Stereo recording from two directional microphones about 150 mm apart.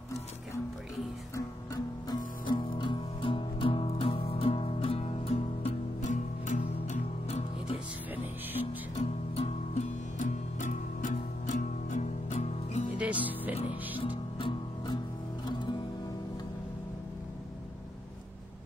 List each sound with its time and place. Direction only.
2.0 s music: 30° left (ahead or behind)
8.9 s music: 45° left (ahead or behind)
12.9 s music: 10° right (ahead or behind)
13.6 s music: 35° left (ahead or behind)